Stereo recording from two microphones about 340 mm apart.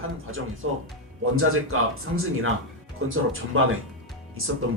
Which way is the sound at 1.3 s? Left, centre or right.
Right.